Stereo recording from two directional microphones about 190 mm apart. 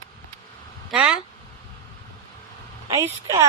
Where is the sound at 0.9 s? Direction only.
5° right (ahead or behind).